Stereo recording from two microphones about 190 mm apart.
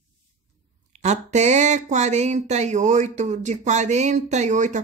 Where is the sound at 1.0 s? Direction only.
35° right (ahead or behind).